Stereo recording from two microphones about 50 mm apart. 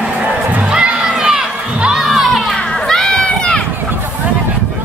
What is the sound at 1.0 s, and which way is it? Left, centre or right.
Crowd, centre.